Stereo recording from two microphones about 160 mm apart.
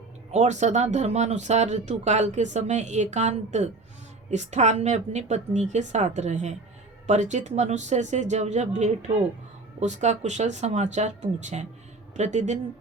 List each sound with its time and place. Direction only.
0.3 s speech: 45° right (ahead or behind)